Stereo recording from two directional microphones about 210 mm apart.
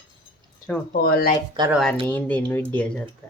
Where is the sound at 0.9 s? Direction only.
45° left (ahead or behind).